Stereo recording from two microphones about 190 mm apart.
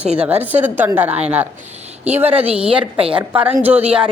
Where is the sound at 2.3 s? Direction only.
30° right (ahead or behind).